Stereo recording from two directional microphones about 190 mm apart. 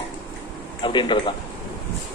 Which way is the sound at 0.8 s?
25° left (ahead or behind).